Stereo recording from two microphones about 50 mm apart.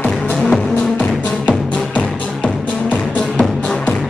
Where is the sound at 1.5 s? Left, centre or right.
Left.